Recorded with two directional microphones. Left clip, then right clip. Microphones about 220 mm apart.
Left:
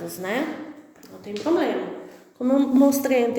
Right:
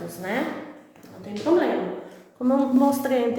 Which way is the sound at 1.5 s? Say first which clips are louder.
Right 1 dB; 40° left (ahead or behind).